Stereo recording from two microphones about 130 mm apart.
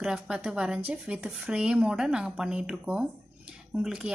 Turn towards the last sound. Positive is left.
turn(degrees=-5)  # may be behind; listen again after turning